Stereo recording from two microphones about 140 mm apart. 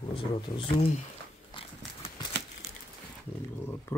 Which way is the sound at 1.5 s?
40° left (ahead or behind).